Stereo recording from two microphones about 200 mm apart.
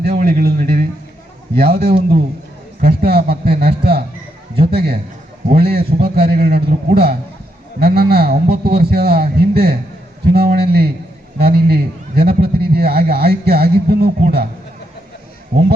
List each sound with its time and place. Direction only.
0.0 s a man's voice: 50° right (ahead or behind)